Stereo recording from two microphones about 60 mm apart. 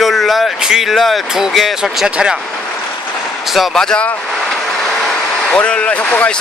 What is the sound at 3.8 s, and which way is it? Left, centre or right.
Speech, centre.